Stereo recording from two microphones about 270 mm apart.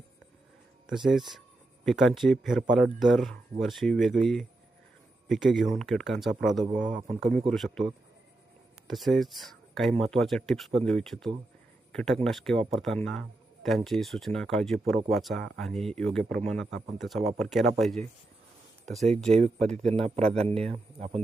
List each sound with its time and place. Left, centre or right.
0.9 s a man's voice: centre
7.3 s a man's voice: right
7.5 s a man's voice: centre
19.3 s a man's voice: right